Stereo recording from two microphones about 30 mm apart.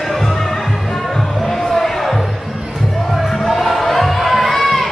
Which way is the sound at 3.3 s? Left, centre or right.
Centre.